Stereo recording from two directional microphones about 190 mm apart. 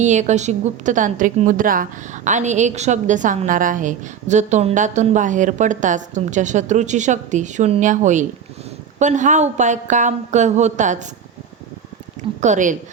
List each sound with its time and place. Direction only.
0.0 s a woman's voice: 40° right (ahead or behind)
12.4 s a woman's voice: 40° right (ahead or behind)